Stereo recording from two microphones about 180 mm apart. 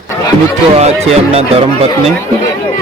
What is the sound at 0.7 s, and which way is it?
Speech, 35° right (ahead or behind).